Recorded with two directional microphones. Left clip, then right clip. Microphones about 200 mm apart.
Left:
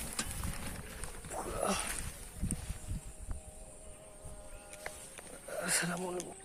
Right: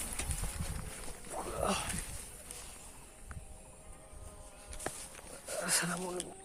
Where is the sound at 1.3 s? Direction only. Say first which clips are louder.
Even; centre (ahead or behind).